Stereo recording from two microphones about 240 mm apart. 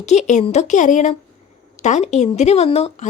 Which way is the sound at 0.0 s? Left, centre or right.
Left.